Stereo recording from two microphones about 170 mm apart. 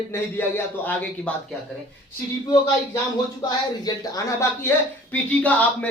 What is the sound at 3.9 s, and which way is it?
Speech, 20° left (ahead or behind).